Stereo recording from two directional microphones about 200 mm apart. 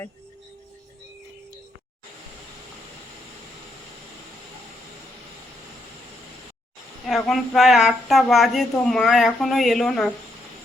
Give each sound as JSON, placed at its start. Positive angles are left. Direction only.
{"t": 7.3, "sound": "speech", "side_deg": 0}